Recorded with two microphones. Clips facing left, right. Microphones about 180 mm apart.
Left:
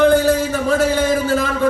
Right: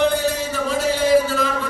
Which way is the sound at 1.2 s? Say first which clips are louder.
Left 4 dB; 50° left (ahead or behind).